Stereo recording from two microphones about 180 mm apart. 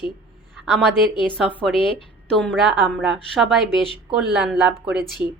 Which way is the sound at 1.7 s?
30° left (ahead or behind).